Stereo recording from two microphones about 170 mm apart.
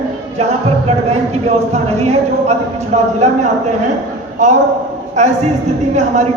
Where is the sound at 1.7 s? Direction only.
40° right (ahead or behind).